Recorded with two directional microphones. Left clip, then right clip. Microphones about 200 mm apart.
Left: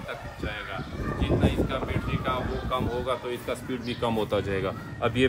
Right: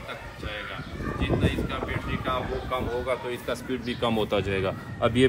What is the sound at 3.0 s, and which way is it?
A man's voice, 20° right (ahead or behind).